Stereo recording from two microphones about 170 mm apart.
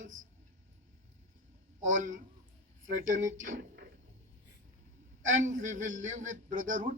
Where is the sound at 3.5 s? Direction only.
90° right.